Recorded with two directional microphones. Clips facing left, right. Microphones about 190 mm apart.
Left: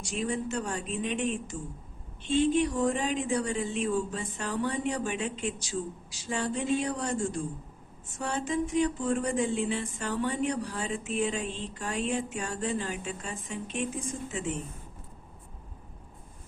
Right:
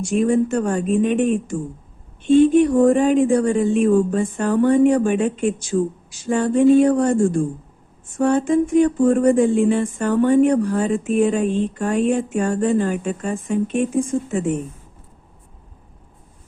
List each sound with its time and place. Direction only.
0.0 s speech: 50° right (ahead or behind)